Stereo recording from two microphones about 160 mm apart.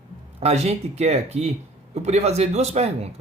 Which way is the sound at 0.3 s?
40° right (ahead or behind).